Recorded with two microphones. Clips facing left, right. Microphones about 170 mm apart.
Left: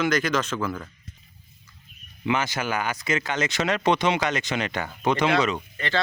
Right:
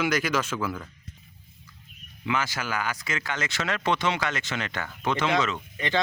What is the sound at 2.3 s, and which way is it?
Speech, 20° left (ahead or behind).